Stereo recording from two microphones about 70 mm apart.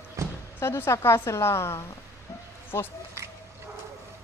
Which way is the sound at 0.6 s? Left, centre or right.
Left.